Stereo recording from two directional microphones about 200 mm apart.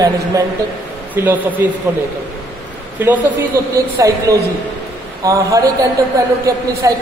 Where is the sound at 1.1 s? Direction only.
10° right (ahead or behind).